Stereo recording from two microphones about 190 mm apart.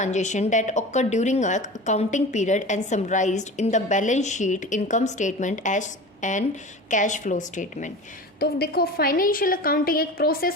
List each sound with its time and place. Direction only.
0.0 s a woman's voice: 40° left (ahead or behind)
8.4 s a woman's voice: 55° left (ahead or behind)